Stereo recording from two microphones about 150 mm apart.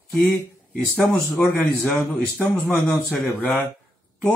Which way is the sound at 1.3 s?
10° left (ahead or behind).